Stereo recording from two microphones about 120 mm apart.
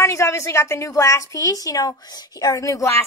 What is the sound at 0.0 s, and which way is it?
A woman's voice, 25° left (ahead or behind).